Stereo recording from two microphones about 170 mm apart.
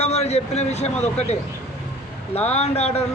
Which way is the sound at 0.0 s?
40° left (ahead or behind).